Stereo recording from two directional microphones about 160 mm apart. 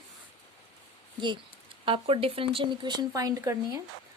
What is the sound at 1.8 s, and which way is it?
Speech, 35° right (ahead or behind).